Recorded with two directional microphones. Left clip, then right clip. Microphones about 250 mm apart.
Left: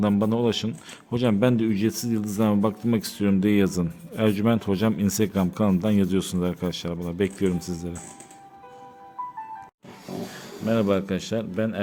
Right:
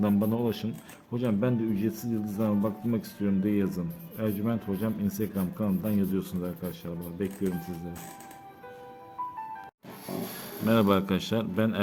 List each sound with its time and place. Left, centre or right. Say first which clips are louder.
0.0 s a man's voice: left 5 dB; left
10.7 s a man's voice: left 1 dB; centre